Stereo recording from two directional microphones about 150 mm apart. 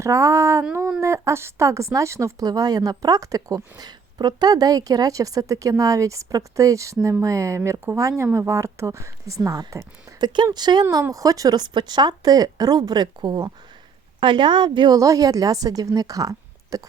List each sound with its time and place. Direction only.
0.0 s speech: 20° right (ahead or behind)
0.6 s a sound: 10° right (ahead or behind)
1.0 s speech: 20° right (ahead or behind)
10.8 s speech: 20° right (ahead or behind)